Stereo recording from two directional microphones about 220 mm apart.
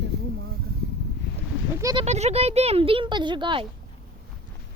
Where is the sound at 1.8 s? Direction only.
15° right (ahead or behind).